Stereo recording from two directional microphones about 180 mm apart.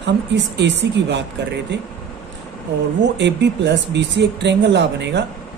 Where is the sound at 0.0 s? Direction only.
75° right (ahead or behind).